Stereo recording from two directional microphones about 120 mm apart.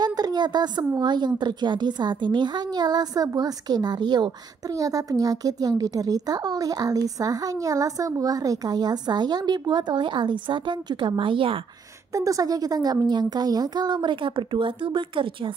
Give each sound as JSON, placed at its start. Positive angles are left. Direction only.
{"t": 0.0, "sound": "a woman's voice", "side_deg": -35}
{"t": 12.1, "sound": "a woman's voice", "side_deg": -30}